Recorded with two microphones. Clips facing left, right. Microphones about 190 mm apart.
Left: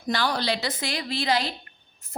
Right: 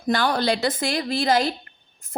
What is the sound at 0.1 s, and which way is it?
A woman's voice, 50° right (ahead or behind).